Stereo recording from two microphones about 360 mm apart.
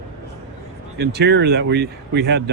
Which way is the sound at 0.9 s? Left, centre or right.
Right.